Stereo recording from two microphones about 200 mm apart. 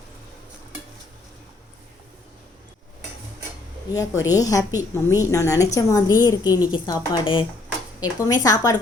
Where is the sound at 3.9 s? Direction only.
15° left (ahead or behind).